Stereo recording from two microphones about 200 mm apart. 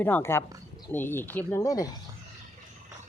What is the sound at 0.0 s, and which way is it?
Speech, 10° left (ahead or behind).